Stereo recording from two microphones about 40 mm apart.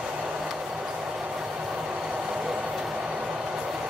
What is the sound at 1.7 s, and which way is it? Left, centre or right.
Train, right.